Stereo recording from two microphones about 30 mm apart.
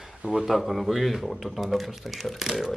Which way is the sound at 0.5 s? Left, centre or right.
Centre.